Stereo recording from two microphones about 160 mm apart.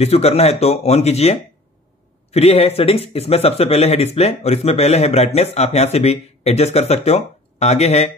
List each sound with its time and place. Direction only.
0.0 s speech: 40° left (ahead or behind)